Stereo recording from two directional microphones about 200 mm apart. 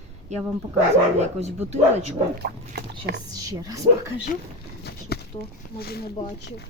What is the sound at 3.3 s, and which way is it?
Speech, 20° right (ahead or behind).